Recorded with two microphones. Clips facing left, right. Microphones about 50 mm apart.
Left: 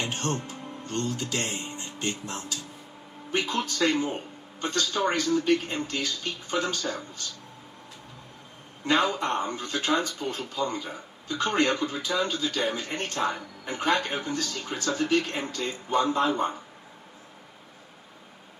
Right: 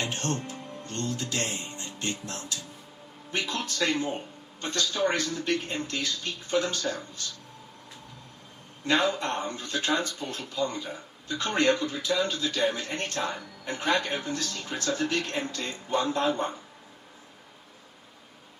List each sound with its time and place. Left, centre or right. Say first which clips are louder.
0.0 s music: left 1 dB; left
1.6 s speech: left 2 dB; left
8.9 s speech: left 1 dB; left